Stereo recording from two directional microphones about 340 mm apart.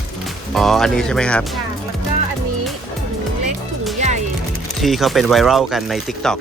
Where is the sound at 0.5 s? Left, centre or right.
Centre.